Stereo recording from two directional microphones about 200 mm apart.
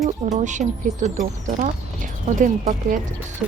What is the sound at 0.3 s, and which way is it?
Speech, 35° right (ahead or behind).